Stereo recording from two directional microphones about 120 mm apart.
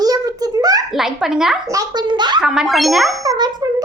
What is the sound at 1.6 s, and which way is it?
Speech, 35° right (ahead or behind).